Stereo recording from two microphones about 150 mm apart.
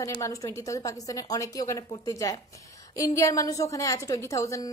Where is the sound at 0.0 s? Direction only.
20° left (ahead or behind).